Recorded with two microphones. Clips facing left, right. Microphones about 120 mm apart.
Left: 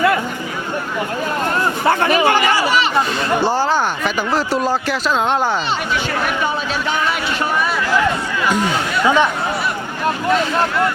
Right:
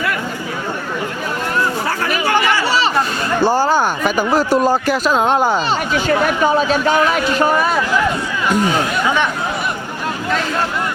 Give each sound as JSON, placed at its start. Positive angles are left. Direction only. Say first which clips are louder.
{"t": 1.9, "sound": "chatter", "louder": "left 3 dB", "side_deg": 25}
{"t": 2.6, "sound": "chatter", "louder": "even", "side_deg": -35}
{"t": 3.4, "sound": "speech", "louder": "right 5 dB", "side_deg": -10}
{"t": 6.7, "sound": "speech", "louder": "right 5 dB", "side_deg": -45}